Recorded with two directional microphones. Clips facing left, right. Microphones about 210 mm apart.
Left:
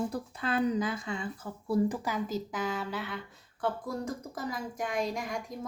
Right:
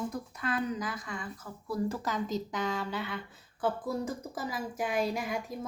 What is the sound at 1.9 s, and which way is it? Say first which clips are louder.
Speech: even; 10° left (ahead or behind).